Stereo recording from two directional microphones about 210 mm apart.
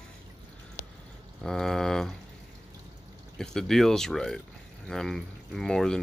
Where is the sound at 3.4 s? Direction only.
Centre (ahead or behind).